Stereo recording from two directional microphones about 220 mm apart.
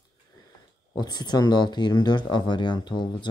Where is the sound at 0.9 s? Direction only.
20° left (ahead or behind).